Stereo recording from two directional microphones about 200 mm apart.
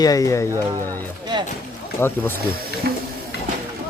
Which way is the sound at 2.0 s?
10° left (ahead or behind).